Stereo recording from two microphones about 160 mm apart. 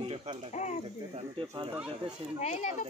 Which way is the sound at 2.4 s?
45° left (ahead or behind).